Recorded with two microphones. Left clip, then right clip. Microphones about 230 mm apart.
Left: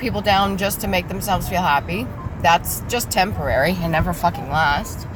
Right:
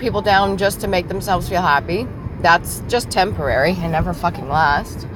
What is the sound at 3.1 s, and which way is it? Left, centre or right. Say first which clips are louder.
Speech: even; centre.